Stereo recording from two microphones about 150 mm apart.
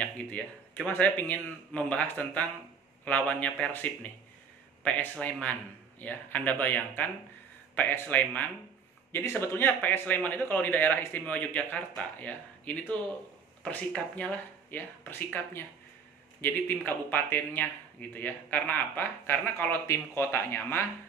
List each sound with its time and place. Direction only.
0.0 s a man's voice: 10° left (ahead or behind)